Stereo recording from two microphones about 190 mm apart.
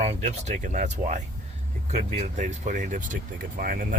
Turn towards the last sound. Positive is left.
turn(degrees=-45)  # may be behind; listen again after turning